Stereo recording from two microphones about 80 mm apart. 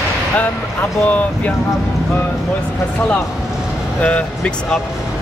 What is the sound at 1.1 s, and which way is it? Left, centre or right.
Speech, centre.